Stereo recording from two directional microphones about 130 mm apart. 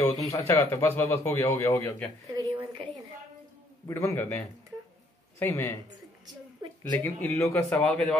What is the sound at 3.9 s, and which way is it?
Speech, 20° left (ahead or behind).